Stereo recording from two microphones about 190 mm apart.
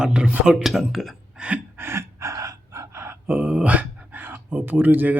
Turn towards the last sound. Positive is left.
turn(degrees=-10)  # may be behind; listen again after turning